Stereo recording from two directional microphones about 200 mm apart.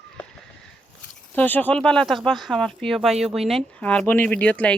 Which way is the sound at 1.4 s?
10° left (ahead or behind).